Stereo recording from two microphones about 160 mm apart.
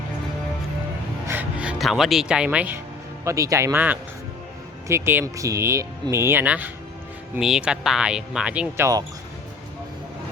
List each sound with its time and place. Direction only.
1.3 s speech: 10° right (ahead or behind)
3.2 s speech: 20° right (ahead or behind)